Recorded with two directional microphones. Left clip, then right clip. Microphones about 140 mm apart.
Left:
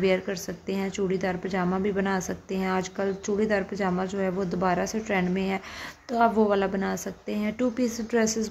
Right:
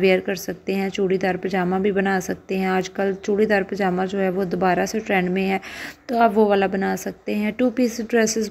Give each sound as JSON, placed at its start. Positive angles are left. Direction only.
{"t": 0.0, "sound": "a woman's voice", "side_deg": -25}